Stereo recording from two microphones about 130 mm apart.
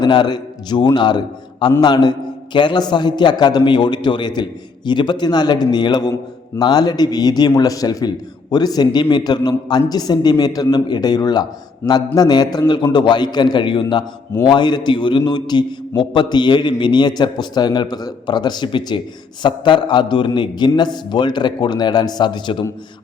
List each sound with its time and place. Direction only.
0.0 s a man's voice: 35° left (ahead or behind)